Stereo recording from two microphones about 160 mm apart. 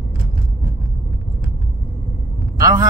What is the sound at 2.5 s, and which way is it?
Speech, 20° right (ahead or behind).